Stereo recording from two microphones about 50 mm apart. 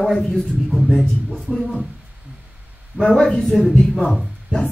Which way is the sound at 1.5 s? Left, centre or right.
Centre.